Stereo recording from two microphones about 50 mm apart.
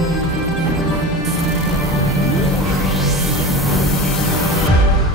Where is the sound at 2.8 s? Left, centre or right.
Centre.